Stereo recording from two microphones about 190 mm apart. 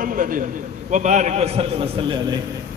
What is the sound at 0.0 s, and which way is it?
A man's voice, 45° right (ahead or behind).